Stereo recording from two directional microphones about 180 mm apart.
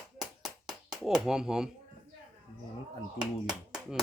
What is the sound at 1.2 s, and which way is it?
Speech, 5° right (ahead or behind).